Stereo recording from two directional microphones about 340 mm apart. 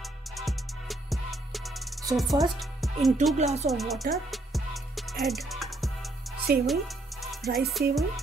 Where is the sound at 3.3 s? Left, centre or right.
Centre.